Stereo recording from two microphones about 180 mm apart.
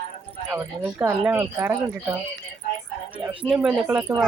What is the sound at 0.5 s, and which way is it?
Speech, 10° right (ahead or behind).